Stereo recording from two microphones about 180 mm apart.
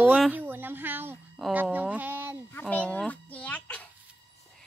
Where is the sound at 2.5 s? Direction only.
10° left (ahead or behind).